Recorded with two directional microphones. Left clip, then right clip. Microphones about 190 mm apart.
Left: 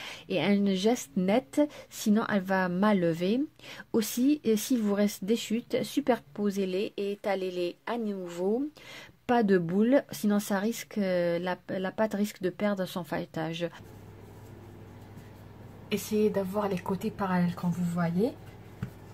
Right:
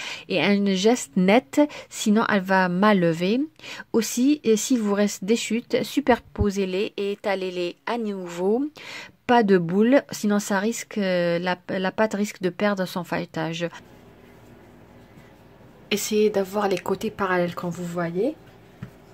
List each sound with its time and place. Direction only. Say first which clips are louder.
0.0 s speech: right 7 dB; 10° right (ahead or behind)
15.9 s speech: right 7 dB; 60° right (ahead or behind)